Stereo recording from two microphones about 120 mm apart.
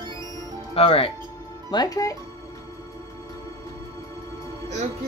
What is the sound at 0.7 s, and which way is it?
Speech, 55° left (ahead or behind).